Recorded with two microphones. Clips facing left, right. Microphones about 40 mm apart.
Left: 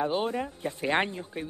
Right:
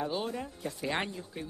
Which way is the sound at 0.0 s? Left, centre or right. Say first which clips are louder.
Left 6 dB; left.